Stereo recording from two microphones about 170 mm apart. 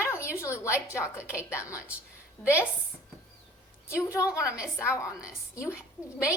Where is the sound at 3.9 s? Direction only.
15° left (ahead or behind).